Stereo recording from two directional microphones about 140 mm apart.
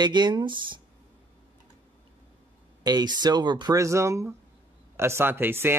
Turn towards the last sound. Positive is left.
turn(degrees=-15)  # may be behind; listen again after turning